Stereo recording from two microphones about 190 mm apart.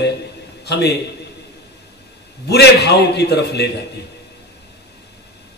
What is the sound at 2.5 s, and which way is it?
A man's voice, 60° left (ahead or behind).